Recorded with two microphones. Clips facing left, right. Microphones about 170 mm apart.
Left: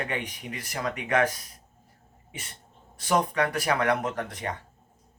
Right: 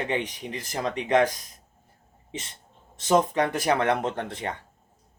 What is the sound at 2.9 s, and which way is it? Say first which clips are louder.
Speech: right 3 dB; 25° right (ahead or behind).